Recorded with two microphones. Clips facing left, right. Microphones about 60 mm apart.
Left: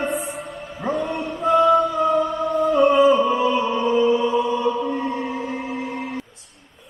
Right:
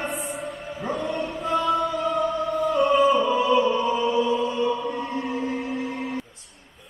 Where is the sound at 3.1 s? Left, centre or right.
Left.